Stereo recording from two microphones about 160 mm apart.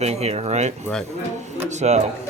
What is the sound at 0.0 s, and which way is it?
Speech, 40° right (ahead or behind).